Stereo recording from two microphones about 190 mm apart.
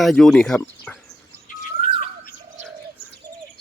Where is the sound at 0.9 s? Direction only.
10° left (ahead or behind).